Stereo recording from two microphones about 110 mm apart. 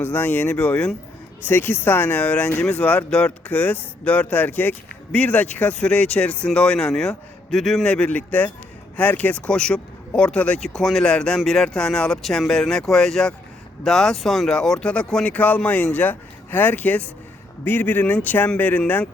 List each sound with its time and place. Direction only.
0.0 s speech: 20° left (ahead or behind)